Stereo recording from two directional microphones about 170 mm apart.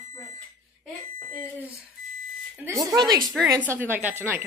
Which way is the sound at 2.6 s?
20° right (ahead or behind).